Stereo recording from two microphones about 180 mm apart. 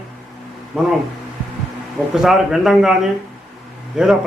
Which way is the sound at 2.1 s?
Centre (ahead or behind).